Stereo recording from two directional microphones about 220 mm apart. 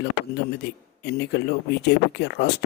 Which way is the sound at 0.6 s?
50° left (ahead or behind).